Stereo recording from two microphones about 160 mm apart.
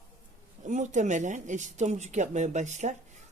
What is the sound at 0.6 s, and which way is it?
A woman's voice, 50° right (ahead or behind).